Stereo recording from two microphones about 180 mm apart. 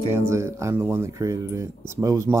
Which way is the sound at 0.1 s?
15° right (ahead or behind).